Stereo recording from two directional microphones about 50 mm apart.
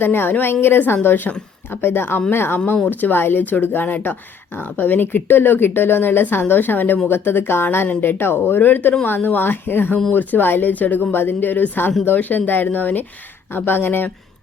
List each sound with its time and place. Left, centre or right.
0.0 s speech: left
2.9 s speech: left